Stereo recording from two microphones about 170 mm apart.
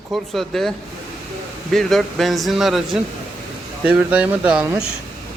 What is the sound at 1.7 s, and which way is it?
A man's voice, centre (ahead or behind).